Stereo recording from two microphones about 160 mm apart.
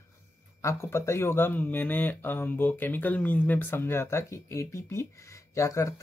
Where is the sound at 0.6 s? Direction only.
15° left (ahead or behind).